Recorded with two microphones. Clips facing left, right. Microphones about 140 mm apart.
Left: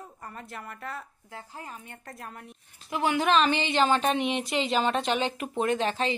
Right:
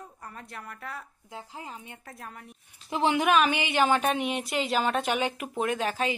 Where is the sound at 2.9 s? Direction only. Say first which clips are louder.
Right 2 dB; 25° right (ahead or behind).